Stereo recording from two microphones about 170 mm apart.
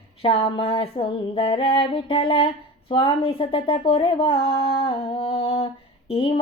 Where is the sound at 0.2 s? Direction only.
35° left (ahead or behind).